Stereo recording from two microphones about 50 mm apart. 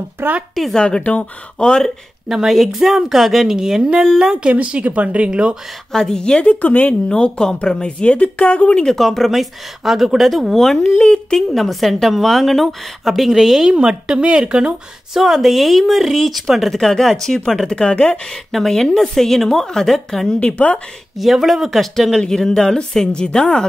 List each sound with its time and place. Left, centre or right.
0.2 s speech: right
0.7 s speech: centre
2.2 s a woman's voice: centre; by 5.6 s right
5.9 s speech: centre
6.5 s speech: left
7.1 s speech: centre
8.9 s speech: centre
11.5 s a woman's voice: centre; by 14.8 s right
15.1 s speech: centre; by 18.2 s left
18.5 s speech: centre
20.3 s speech: left
21.2 s speech: centre